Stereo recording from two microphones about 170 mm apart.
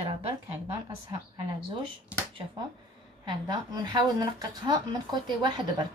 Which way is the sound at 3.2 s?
25° right (ahead or behind).